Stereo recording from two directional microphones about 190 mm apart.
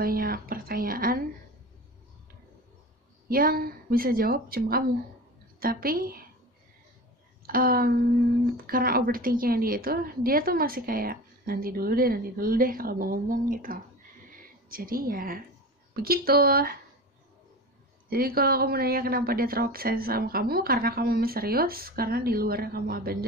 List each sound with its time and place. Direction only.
0.0 s a sound: 50° right (ahead or behind)
3.3 s a woman's voice: 50° right (ahead or behind)
7.4 s a woman's voice: 50° right (ahead or behind)
18.1 s a woman's voice: 50° right (ahead or behind)